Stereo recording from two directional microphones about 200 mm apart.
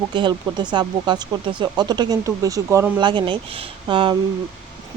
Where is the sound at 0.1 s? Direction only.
25° right (ahead or behind).